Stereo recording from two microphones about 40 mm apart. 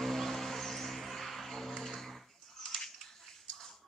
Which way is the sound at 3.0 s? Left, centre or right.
Centre.